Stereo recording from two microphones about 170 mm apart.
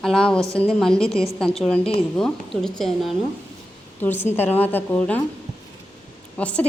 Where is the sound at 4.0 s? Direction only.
10° left (ahead or behind).